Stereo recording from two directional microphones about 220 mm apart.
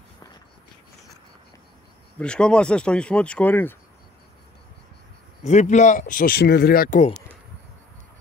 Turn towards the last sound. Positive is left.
turn(degrees=40)  # may be behind; listen again after turning